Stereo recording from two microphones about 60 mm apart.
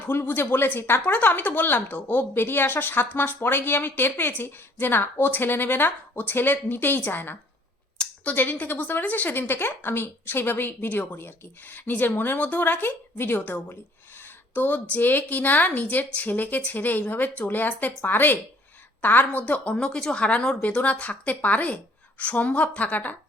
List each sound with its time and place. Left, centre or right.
0.0 s speech: left
7.9 s a sound: left
8.6 s a woman's voice: left